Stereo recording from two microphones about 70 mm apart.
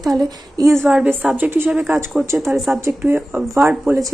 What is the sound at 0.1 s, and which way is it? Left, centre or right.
Speech, right.